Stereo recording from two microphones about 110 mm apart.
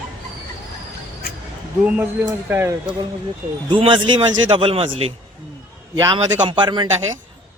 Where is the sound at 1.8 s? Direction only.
20° right (ahead or behind).